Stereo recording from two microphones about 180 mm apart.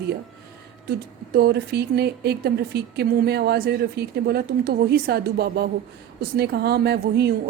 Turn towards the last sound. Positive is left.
turn(degrees=-65)  # may be behind; listen again after turning